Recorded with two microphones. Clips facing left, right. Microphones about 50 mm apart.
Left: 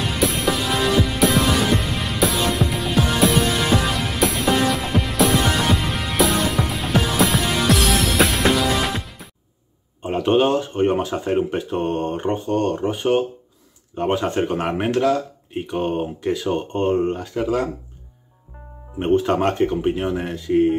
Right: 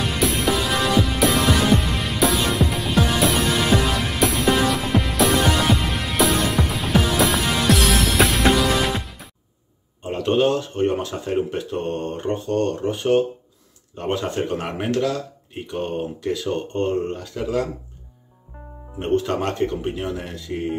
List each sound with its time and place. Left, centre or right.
0.0 s music: centre
10.0 s speech: left
18.9 s speech: centre